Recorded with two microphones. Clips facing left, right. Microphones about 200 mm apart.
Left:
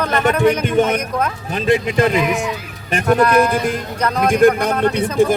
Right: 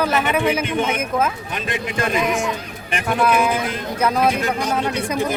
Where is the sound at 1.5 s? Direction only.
25° left (ahead or behind).